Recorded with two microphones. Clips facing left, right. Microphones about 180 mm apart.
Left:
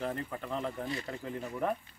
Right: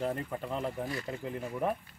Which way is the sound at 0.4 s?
5° right (ahead or behind).